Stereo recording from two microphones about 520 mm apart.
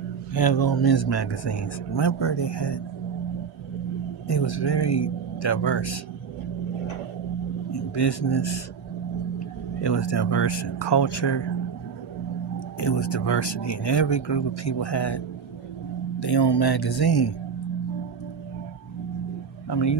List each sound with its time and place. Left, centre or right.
0.3 s speech: left
4.3 s speech: left
7.9 s speech: left
9.8 s speech: left
13.0 s speech: left